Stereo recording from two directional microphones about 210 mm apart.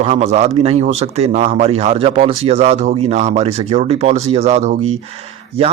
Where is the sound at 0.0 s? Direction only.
30° right (ahead or behind).